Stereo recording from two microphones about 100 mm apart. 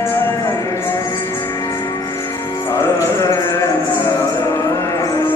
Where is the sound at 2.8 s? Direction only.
30° left (ahead or behind).